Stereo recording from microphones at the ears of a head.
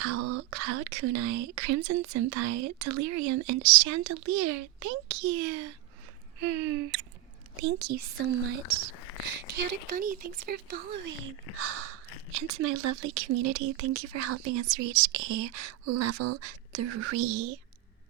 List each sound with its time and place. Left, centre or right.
0.0 s speech: right